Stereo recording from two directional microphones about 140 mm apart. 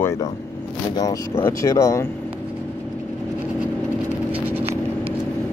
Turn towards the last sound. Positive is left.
turn(degrees=-15)  # may be behind; listen again after turning